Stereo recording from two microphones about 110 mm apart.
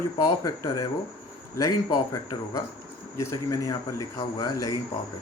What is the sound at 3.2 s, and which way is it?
Speech, 30° left (ahead or behind).